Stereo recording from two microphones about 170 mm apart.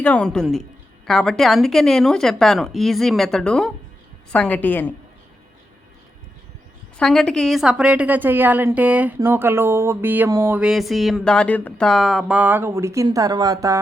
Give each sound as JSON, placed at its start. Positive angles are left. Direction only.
{"t": 0.0, "sound": "a woman's voice", "side_deg": 5}
{"t": 6.9, "sound": "a woman's voice", "side_deg": 5}
{"t": 10.6, "sound": "speech", "side_deg": 0}